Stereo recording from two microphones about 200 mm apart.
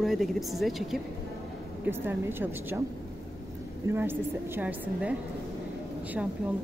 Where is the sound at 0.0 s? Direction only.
Centre (ahead or behind).